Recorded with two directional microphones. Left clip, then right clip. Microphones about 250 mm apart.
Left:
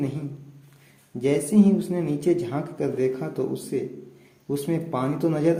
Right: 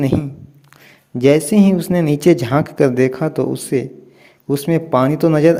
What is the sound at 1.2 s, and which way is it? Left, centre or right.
Speech, right.